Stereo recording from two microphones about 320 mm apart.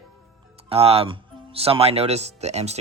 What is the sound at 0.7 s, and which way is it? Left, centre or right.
Speech, centre.